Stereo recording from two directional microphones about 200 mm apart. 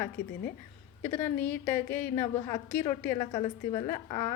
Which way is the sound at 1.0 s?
10° left (ahead or behind).